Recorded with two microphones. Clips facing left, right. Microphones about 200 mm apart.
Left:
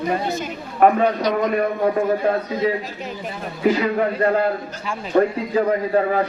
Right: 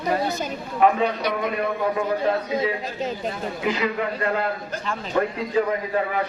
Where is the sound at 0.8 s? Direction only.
50° left (ahead or behind).